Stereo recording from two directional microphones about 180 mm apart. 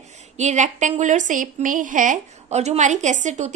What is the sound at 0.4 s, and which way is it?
Speech, 40° right (ahead or behind).